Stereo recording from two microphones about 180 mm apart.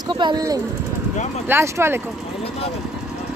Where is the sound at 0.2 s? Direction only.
20° right (ahead or behind).